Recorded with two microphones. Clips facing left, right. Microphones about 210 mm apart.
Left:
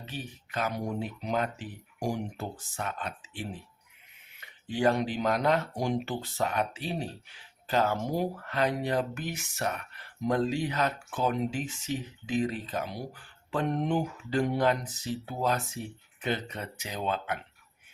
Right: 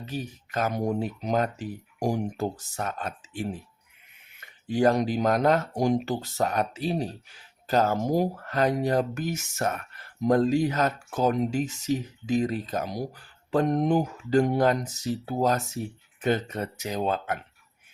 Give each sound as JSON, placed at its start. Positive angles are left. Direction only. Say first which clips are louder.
{"t": 0.0, "sound": "speech", "louder": "right 6 dB", "side_deg": -40}